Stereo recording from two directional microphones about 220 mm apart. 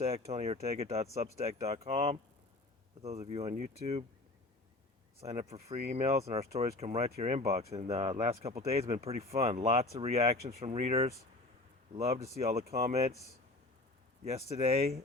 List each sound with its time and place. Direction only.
0.0 s speech: 30° right (ahead or behind)
5.2 s speech: 30° right (ahead or behind)
14.3 s speech: 30° right (ahead or behind)